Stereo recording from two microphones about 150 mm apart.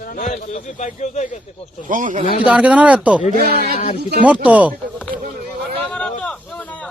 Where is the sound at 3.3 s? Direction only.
80° right.